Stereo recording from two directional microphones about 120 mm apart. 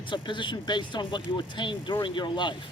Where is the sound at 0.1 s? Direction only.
40° left (ahead or behind).